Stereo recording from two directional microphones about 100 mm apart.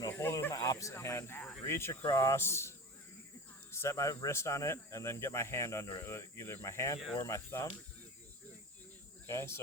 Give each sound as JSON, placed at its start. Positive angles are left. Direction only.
{"t": 0.1, "sound": "snake", "side_deg": 25}
{"t": 0.5, "sound": "speech", "side_deg": 35}
{"t": 9.2, "sound": "speech", "side_deg": 25}